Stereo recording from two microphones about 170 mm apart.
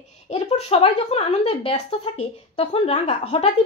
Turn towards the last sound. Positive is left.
turn(degrees=35)  # may be behind; listen again after turning